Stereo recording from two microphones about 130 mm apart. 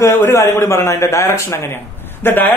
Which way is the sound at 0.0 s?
20° left (ahead or behind).